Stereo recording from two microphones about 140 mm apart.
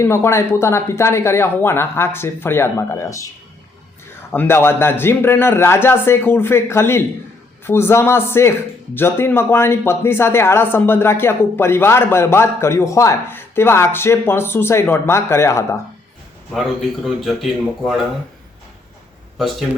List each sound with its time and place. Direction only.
0.0 s a man's voice: 20° left (ahead or behind)
4.3 s a man's voice: 15° left (ahead or behind)
16.5 s a man's voice: centre (ahead or behind)
19.4 s a man's voice: centre (ahead or behind)